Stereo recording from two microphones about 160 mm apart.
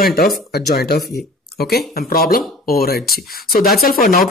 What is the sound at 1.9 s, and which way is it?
Speech, 70° left (ahead or behind).